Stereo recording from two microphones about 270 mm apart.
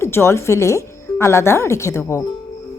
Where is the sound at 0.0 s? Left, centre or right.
Centre.